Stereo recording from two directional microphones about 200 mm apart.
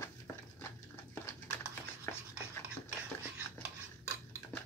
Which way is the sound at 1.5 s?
10° left (ahead or behind).